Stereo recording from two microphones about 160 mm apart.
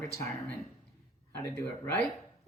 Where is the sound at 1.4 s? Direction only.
15° left (ahead or behind).